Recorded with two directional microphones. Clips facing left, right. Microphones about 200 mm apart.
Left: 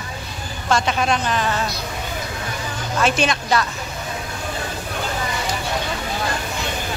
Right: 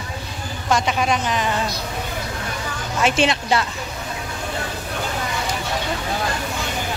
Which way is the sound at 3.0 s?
25° right (ahead or behind).